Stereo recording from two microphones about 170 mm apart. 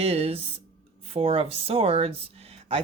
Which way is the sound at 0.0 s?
35° right (ahead or behind).